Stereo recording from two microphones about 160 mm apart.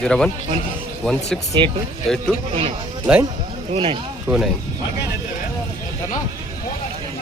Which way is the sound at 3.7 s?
35° right (ahead or behind).